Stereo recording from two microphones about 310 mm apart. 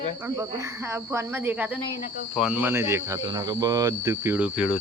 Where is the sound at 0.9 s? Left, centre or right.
Centre.